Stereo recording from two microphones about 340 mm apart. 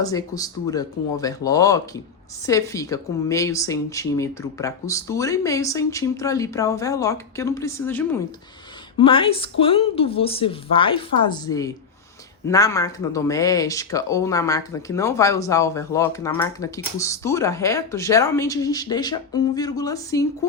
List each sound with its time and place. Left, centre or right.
0.0 s speech: centre